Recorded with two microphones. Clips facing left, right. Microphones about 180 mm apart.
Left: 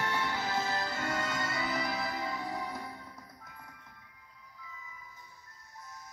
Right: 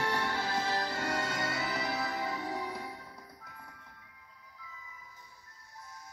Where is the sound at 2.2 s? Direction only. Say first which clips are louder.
Right 1 dB; 30° right (ahead or behind).